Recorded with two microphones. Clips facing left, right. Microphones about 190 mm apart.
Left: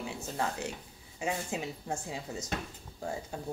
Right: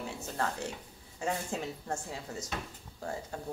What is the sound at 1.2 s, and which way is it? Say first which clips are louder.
Speech: even; 10° left (ahead or behind).